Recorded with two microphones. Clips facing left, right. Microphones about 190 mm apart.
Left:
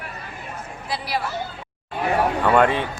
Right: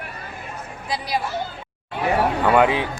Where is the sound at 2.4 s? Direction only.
5° right (ahead or behind).